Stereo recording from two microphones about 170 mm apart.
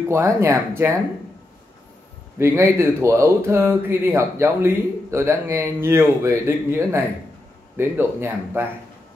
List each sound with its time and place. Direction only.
0.1 s speech: 15° right (ahead or behind)
2.3 s speech: 15° right (ahead or behind)